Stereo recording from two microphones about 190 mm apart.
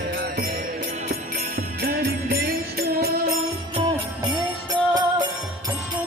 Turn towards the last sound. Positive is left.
turn(degrees=-25)  # may be behind; listen again after turning